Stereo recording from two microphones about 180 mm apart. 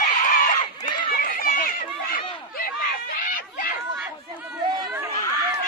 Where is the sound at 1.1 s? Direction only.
50° left (ahead or behind).